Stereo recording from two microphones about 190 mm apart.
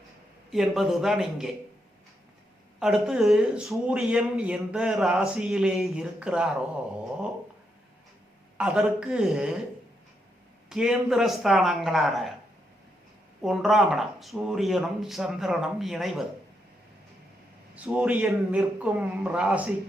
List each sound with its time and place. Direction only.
0.5 s speech: centre (ahead or behind)
2.8 s speech: centre (ahead or behind)
8.5 s speech: 5° right (ahead or behind)
10.7 s speech: 5° right (ahead or behind)
13.4 s speech: centre (ahead or behind)
17.8 s a man's voice: 5° right (ahead or behind)